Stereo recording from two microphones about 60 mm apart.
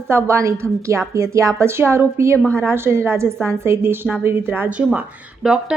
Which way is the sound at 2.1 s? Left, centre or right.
Right.